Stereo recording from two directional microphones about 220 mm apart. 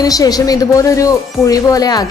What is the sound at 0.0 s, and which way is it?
Speech, 15° left (ahead or behind).